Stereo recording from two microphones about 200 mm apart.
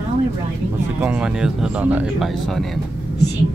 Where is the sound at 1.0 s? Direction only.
5° right (ahead or behind).